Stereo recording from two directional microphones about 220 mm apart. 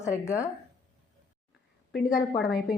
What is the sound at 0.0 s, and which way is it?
Speech, 15° left (ahead or behind).